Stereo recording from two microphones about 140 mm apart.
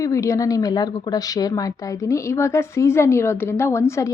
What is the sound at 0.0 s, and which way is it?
A woman's voice, 20° left (ahead or behind).